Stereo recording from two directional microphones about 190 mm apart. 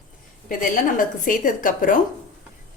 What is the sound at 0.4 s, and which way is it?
A woman's voice, 45° left (ahead or behind).